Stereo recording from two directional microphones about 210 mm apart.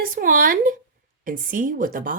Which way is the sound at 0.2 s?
40° right (ahead or behind).